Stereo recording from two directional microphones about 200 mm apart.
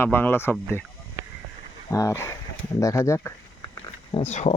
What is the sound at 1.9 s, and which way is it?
Speech, 15° left (ahead or behind).